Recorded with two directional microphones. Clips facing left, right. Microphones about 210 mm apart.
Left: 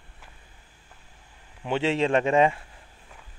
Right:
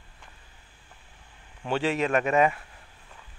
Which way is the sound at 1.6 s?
20° left (ahead or behind).